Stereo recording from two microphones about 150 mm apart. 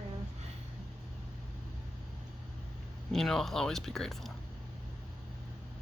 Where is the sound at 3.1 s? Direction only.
Centre (ahead or behind).